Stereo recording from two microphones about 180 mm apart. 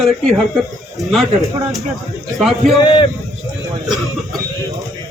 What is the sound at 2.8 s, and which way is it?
Speech, 25° left (ahead or behind).